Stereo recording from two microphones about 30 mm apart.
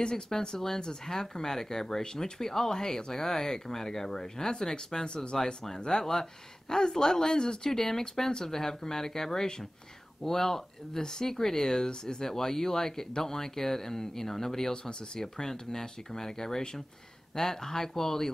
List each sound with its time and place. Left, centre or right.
0.0 s speech: left
5.0 s speech: left
5.3 s speech: left
7.7 s speech: centre